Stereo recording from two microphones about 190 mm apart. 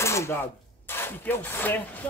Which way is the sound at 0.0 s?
15° left (ahead or behind).